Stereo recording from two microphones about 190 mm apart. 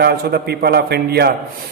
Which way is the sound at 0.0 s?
60° right (ahead or behind).